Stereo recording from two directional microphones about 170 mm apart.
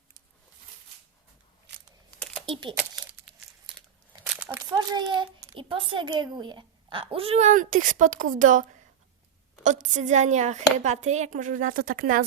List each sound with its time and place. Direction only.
2.0 s crumpling: 5° left (ahead or behind)
2.5 s speech: 30° right (ahead or behind)
2.7 s a sound: 10° right (ahead or behind)
4.1 s a child's voice: 20° right (ahead or behind); by 8.6 s 50° right (ahead or behind)
9.6 s a woman's voice: 45° right (ahead or behind)